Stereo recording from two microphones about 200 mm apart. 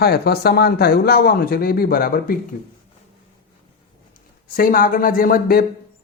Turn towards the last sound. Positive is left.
turn(degrees=50)  # may be behind; listen again after turning